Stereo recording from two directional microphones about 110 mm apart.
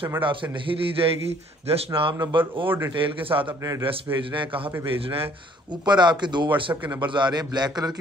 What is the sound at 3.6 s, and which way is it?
Speech, 30° right (ahead or behind).